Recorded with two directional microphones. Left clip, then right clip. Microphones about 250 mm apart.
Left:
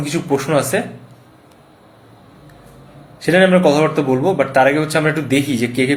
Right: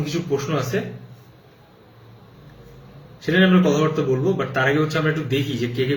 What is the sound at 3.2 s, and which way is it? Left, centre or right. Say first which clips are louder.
Speech: left 7 dB; centre.